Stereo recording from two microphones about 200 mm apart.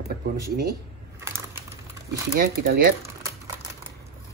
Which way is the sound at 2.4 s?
45° right (ahead or behind).